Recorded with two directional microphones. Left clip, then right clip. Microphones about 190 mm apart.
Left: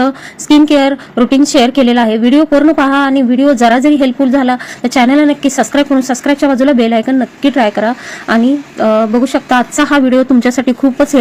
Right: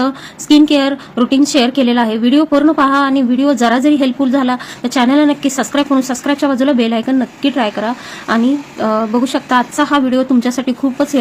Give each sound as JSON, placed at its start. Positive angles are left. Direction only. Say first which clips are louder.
{"t": 0.5, "sound": "a woman's voice", "louder": "left 2 dB", "side_deg": 15}